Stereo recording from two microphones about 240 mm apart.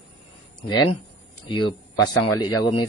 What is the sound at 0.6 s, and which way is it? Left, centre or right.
Speech, centre.